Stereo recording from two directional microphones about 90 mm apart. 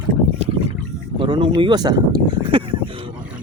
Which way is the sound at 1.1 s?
70° right (ahead or behind).